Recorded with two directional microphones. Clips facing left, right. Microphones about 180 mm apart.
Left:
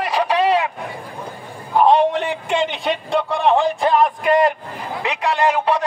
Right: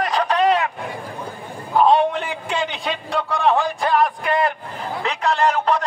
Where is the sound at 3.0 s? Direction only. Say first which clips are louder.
Left 1 dB; 25° left (ahead or behind).